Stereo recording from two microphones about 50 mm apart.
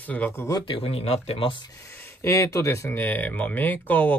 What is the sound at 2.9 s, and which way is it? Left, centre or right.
Speech, left.